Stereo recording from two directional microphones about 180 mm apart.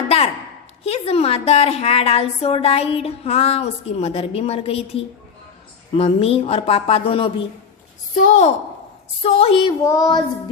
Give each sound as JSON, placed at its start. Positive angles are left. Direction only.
{"t": 0.9, "sound": "a woman's voice", "side_deg": 35}
{"t": 9.8, "sound": "child singing", "side_deg": 20}